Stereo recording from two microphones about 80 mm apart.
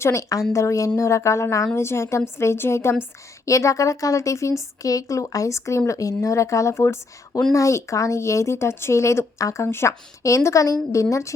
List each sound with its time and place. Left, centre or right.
0.0 s a woman's voice: left